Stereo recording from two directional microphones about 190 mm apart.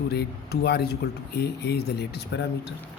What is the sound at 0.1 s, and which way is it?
Speech, 55° left (ahead or behind).